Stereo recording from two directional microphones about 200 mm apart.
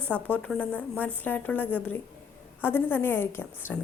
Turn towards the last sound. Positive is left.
turn(degrees=10)  # may be behind; listen again after turning